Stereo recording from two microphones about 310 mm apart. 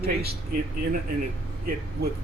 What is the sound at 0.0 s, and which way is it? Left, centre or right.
Speech, right.